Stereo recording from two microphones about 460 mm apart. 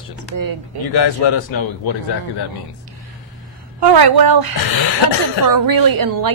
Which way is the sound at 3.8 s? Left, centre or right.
Right.